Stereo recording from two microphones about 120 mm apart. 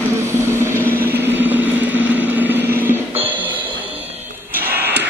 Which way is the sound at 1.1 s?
15° right (ahead or behind).